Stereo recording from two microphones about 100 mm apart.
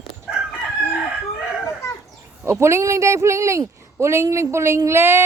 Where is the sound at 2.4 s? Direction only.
25° right (ahead or behind).